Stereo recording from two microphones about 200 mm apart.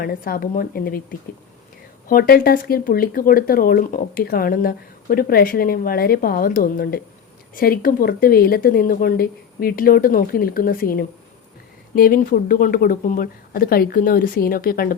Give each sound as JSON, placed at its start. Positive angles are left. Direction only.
{"t": 0.0, "sound": "speech", "side_deg": 50}
{"t": 2.0, "sound": "speech", "side_deg": 50}